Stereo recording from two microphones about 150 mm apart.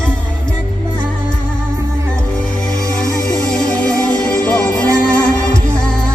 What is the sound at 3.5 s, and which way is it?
Music, 5° left (ahead or behind).